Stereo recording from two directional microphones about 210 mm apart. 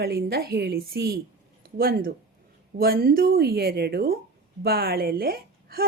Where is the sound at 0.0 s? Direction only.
50° right (ahead or behind).